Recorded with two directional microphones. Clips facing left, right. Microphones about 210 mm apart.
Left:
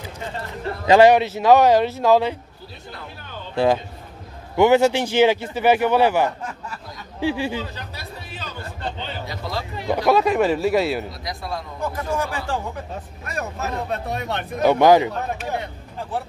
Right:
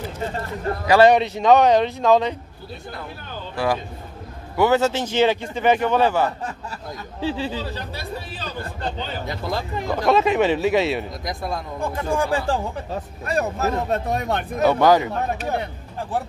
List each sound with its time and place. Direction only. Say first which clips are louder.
0.8 s a man's voice: left 2 dB; 20° left (ahead or behind)
1.1 s speech: left 1 dB; 5° left (ahead or behind)
3.5 s a man's voice: left 4 dB; 25° left (ahead or behind)
7.7 s speech: right 5 dB; 30° right (ahead or behind)
9.0 s speech: right 2 dB; 45° right (ahead or behind)
10.0 s speech: even; centre (ahead or behind)
11.1 s speech: right 3 dB; 50° right (ahead or behind)
11.8 s speech: right 2 dB; 30° right (ahead or behind)
14.6 s a man's voice: left 2 dB; 15° left (ahead or behind)